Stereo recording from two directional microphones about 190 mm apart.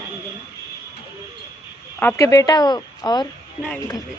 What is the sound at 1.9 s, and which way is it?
Speech, 15° left (ahead or behind).